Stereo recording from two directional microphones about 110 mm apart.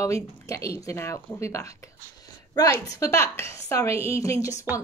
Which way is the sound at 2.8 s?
30° left (ahead or behind).